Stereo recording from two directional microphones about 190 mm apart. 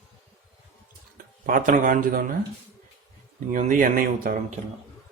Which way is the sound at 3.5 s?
45° right (ahead or behind).